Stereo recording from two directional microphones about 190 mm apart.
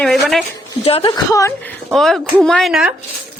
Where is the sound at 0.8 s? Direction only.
30° left (ahead or behind).